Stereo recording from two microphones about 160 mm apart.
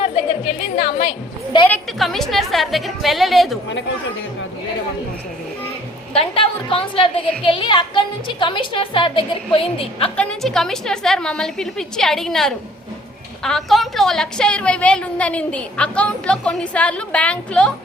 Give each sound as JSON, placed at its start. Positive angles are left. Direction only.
{"t": 0.0, "sound": "a woman's voice", "side_deg": 40}
{"t": 2.0, "sound": "a woman's voice", "side_deg": 0}
{"t": 6.1, "sound": "a woman's voice", "side_deg": 35}
{"t": 10.2, "sound": "a woman's voice", "side_deg": 5}